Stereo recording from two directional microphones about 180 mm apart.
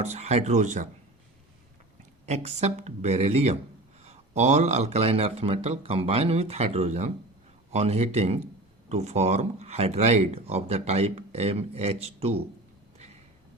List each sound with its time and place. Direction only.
0.0 s speech: 40° right (ahead or behind)
2.2 s speech: 35° right (ahead or behind)